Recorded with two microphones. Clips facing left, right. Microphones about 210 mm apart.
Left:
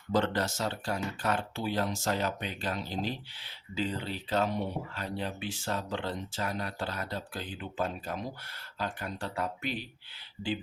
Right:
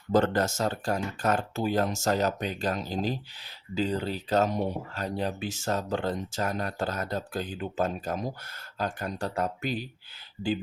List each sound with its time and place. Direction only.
0.1 s speech: 45° right (ahead or behind)